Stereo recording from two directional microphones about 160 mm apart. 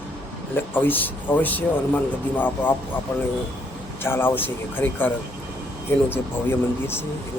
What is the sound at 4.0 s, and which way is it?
Speech, 15° left (ahead or behind).